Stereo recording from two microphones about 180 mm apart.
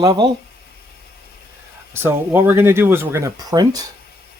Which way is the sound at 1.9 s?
10° right (ahead or behind).